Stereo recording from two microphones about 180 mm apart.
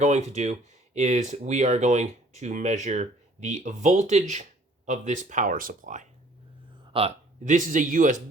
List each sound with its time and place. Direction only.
0.0 s speech: 40° right (ahead or behind)
6.9 s a sound: 35° right (ahead or behind)
7.5 s speech: 45° right (ahead or behind)